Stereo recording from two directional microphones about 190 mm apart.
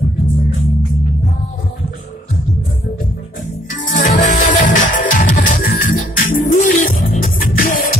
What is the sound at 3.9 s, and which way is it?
Music, 40° left (ahead or behind).